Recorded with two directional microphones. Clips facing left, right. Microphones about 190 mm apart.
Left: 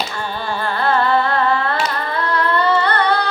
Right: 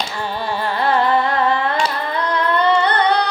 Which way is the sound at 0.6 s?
20° right (ahead or behind).